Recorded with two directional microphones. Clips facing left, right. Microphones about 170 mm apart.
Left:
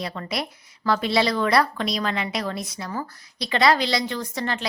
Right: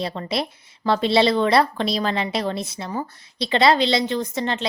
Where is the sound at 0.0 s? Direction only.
25° right (ahead or behind).